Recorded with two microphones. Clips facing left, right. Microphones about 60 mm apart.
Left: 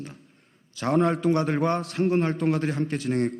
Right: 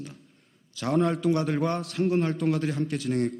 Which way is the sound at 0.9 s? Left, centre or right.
Left.